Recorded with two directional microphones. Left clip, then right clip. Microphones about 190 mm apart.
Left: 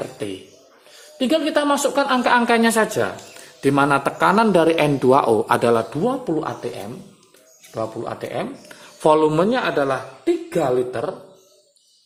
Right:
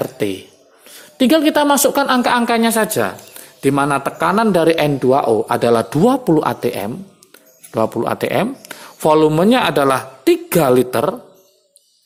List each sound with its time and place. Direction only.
0.0 s a sound: 40° right (ahead or behind)
1.2 s speech: 40° right (ahead or behind); by 4.9 s 20° right (ahead or behind)
4.9 s speech: 10° right (ahead or behind)
5.9 s speech: 40° right (ahead or behind)
8.7 s a sound: 30° right (ahead or behind)
9.5 s speech: 40° right (ahead or behind)